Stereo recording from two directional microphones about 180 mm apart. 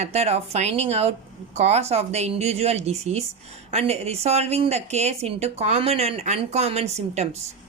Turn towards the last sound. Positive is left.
turn(degrees=-35)  # may be behind; listen again after turning